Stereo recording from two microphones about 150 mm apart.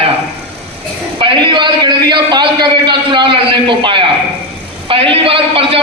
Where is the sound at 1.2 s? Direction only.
35° right (ahead or behind).